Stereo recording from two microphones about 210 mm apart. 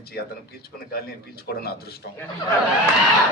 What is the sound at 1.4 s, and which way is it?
Speech, 50° left (ahead or behind).